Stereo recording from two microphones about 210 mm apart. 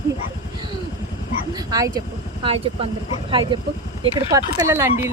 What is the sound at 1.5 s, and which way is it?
Speech, 15° right (ahead or behind).